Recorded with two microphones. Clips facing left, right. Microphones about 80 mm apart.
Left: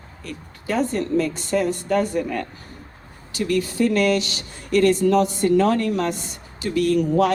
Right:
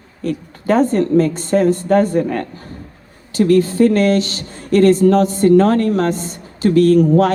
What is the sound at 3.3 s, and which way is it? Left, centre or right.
Speech, right.